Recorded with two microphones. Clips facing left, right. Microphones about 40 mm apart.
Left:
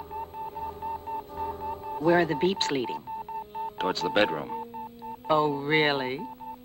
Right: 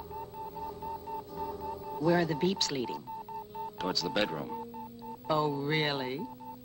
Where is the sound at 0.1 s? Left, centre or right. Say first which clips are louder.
Left 6 dB; left.